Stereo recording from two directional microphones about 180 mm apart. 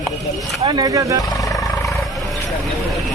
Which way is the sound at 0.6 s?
20° right (ahead or behind).